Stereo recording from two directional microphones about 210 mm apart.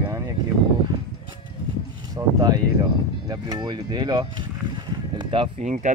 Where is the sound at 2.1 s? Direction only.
15° right (ahead or behind).